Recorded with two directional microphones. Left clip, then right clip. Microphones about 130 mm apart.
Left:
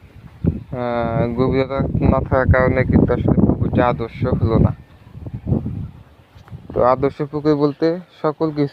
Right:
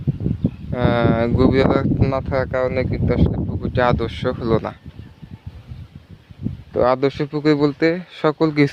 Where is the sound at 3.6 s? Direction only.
35° right (ahead or behind).